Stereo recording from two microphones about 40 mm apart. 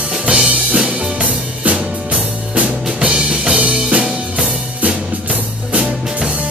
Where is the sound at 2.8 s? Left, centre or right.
Right.